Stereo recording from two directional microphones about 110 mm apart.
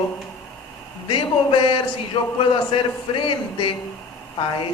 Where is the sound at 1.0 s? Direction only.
50° left (ahead or behind).